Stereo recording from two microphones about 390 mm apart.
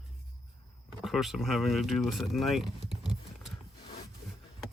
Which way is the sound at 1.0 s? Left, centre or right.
Centre.